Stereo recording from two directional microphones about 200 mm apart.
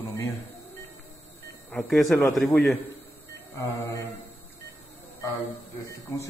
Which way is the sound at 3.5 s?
15° left (ahead or behind).